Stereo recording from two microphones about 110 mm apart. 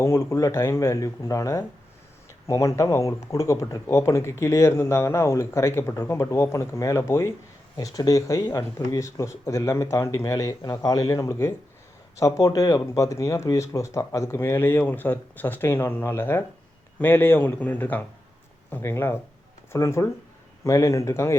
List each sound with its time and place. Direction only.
0.0 s speech: 25° left (ahead or behind)